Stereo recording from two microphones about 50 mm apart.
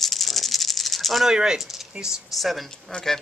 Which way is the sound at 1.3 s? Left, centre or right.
Centre.